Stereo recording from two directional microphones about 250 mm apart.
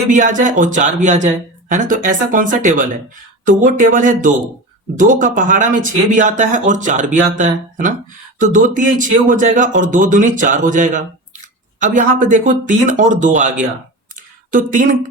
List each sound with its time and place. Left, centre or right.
0.1 s speech: right